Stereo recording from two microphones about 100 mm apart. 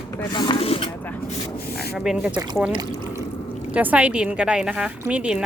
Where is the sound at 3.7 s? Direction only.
15° right (ahead or behind).